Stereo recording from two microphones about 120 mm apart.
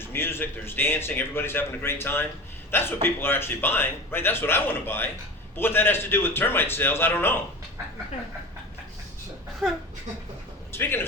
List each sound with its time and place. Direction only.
0.0 s a man's voice: 20° left (ahead or behind)
10.7 s speech: 20° left (ahead or behind)